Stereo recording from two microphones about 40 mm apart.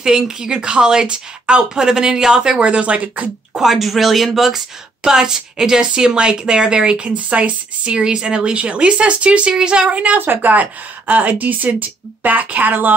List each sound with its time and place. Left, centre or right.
0.0 s a woman's voice: centre
2.6 s speech: right
3.5 s speech: centre
5.0 s a woman's voice: centre
7.1 s speech: right
8.0 s a woman's voice: right
10.1 s a woman's voice: right